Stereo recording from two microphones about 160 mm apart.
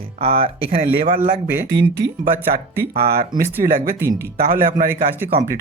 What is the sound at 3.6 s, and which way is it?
Speech, 60° right (ahead or behind).